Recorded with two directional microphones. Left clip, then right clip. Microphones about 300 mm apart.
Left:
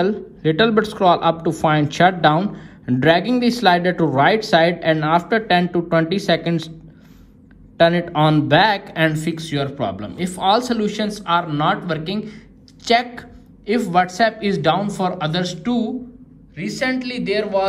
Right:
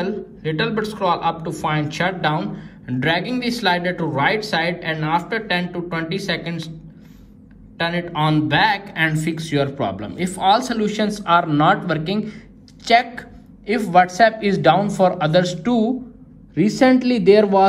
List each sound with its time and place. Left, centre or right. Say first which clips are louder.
0.0 s speech: left 5 dB; left
7.7 s a man's voice: left 7 dB; left; by 17.6 s centre